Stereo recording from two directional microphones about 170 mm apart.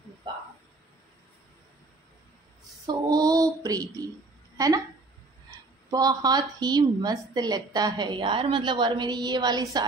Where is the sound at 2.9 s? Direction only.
20° right (ahead or behind).